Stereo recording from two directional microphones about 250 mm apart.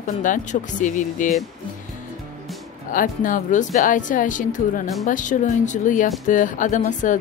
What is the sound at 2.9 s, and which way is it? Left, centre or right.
Speech, left.